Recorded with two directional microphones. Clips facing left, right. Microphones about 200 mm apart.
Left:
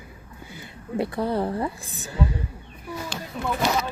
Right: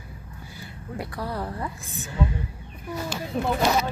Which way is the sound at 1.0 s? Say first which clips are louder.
Left 7 dB; 25° left (ahead or behind).